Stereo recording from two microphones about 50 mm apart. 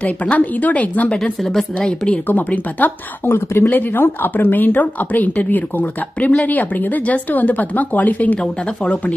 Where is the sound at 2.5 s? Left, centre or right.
Left.